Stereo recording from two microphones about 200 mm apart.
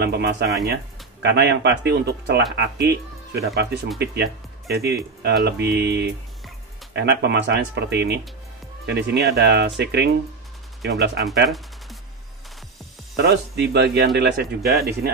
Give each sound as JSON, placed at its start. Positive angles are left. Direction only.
{"t": 0.0, "sound": "speech", "side_deg": -55}
{"t": 13.1, "sound": "speech", "side_deg": -55}